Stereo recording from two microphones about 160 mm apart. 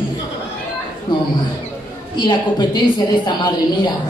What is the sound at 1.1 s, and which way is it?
Speech, 25° left (ahead or behind).